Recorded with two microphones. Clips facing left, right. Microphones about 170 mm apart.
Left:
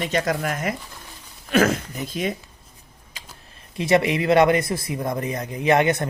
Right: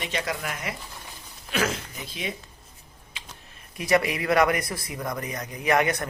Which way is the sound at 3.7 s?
25° left (ahead or behind).